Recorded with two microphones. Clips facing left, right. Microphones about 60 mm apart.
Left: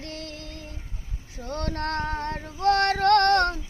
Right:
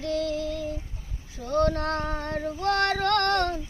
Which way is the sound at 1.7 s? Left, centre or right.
Left.